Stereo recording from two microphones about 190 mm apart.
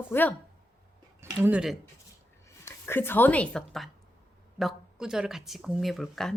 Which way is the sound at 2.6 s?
15° left (ahead or behind).